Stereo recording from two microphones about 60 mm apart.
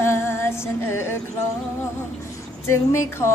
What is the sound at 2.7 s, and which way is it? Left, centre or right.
Music, left.